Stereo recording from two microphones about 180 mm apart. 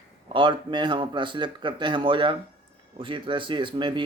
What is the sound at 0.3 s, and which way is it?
Speech, 25° right (ahead or behind).